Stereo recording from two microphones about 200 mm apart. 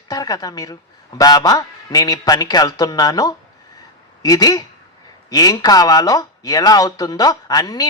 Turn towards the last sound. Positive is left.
turn(degrees=20)  # may be behind; listen again after turning